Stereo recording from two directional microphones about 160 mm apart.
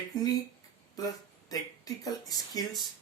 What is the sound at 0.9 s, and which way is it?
Speech, 25° left (ahead or behind).